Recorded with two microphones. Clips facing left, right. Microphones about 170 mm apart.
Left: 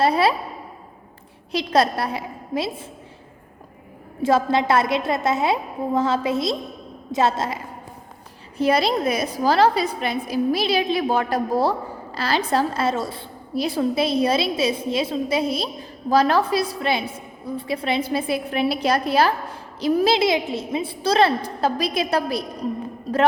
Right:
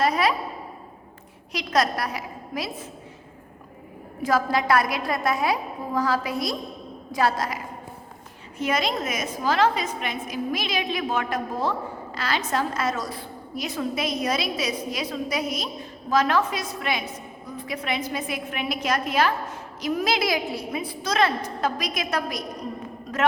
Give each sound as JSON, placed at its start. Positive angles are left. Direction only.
{"t": 0.0, "sound": "a woman's voice", "side_deg": 30}
{"t": 1.5, "sound": "a woman's voice", "side_deg": 30}
{"t": 4.2, "sound": "a woman's voice", "side_deg": 25}